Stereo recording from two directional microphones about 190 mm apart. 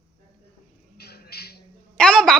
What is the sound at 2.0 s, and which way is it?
Speech, centre (ahead or behind).